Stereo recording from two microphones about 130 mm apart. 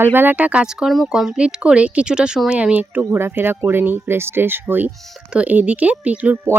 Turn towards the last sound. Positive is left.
turn(degrees=-15)  # may be behind; listen again after turning